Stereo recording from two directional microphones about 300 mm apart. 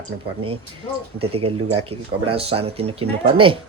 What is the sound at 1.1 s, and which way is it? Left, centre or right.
Speech, centre.